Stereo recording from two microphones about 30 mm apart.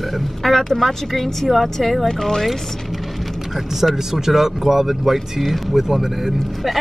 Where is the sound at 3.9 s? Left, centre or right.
Centre.